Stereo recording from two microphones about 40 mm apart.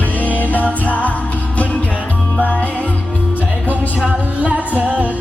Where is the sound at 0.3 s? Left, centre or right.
Left.